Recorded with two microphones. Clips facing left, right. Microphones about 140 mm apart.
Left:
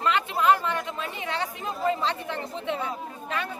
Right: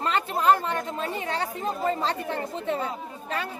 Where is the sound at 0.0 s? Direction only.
35° right (ahead or behind).